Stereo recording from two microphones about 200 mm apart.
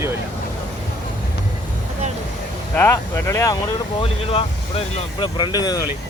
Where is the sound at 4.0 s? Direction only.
30° left (ahead or behind).